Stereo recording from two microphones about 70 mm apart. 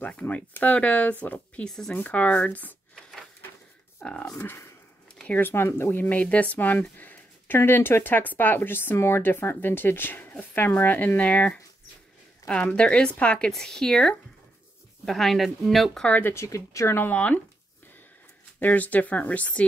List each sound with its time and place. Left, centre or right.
0.0 s speech: left
4.4 s speech: left
5.2 s speech: left
5.5 s speech: left; by 16.0 s centre
16.1 s speech: left
16.3 s speech: left
16.9 s speech: left
18.6 s speech: left